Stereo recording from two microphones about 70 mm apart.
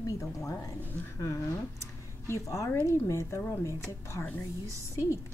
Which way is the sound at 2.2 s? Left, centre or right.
Left.